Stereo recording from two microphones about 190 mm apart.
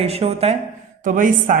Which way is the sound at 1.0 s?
45° right (ahead or behind).